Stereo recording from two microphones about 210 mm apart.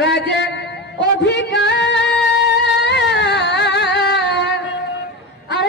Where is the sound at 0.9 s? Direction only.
55° left (ahead or behind).